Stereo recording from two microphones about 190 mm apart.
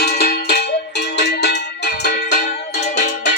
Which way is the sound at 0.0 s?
55° left (ahead or behind).